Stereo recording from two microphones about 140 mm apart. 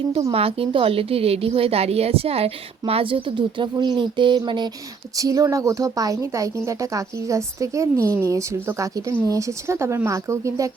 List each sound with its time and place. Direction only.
0.1 s a woman's voice: 45° right (ahead or behind); by 10.7 s 20° right (ahead or behind)